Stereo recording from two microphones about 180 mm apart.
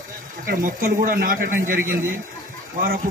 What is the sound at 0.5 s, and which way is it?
Speech, 50° right (ahead or behind).